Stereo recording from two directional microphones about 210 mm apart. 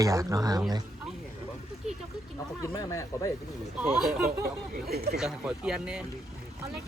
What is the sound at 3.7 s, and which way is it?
Speech, 5° right (ahead or behind).